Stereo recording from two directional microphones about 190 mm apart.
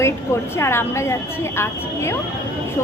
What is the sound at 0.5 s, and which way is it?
A woman's voice, 15° left (ahead or behind).